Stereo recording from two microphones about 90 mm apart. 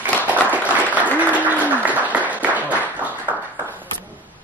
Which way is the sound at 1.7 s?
20° right (ahead or behind).